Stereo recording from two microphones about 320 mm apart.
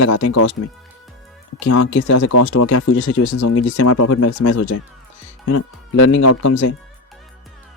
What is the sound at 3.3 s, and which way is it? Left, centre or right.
Speech, left.